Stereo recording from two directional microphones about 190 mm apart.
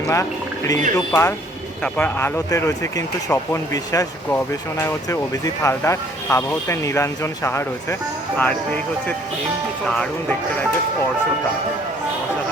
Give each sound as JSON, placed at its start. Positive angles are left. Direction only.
{"t": 0.1, "sound": "speech", "side_deg": 15}